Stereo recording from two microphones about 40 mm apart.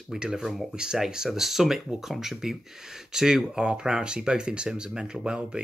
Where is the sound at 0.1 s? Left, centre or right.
Centre.